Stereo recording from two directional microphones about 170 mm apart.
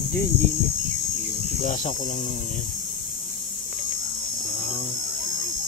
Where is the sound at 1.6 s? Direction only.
45° left (ahead or behind).